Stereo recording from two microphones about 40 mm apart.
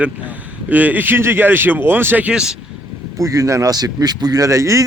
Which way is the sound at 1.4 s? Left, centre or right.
Right.